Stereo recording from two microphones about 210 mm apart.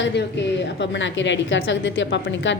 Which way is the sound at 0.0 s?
55° left (ahead or behind).